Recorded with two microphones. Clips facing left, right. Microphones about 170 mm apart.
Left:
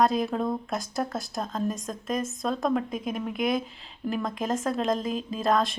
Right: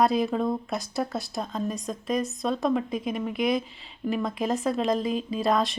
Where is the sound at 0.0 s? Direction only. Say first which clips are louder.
Right 1 dB; centre (ahead or behind).